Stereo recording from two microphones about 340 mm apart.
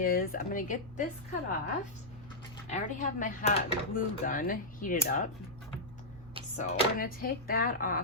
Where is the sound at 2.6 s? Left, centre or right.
Centre.